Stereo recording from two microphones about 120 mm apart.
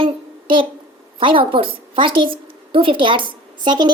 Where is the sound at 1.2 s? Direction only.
45° right (ahead or behind).